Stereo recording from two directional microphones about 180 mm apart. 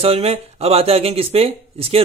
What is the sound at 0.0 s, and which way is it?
A man's voice, 35° right (ahead or behind).